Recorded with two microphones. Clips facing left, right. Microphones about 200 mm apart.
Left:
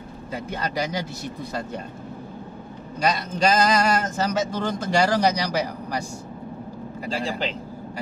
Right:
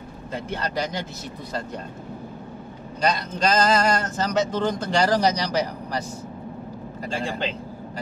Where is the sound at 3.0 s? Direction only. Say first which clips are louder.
Left 1 dB; 10° left (ahead or behind).